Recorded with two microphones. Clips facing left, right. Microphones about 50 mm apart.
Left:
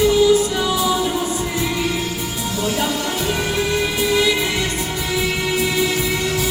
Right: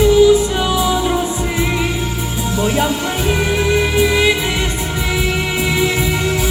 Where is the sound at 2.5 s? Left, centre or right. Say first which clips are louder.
Right 5 dB; right.